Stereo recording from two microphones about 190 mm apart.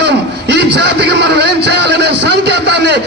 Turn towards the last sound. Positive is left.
turn(degrees=-60)  # may be behind; listen again after turning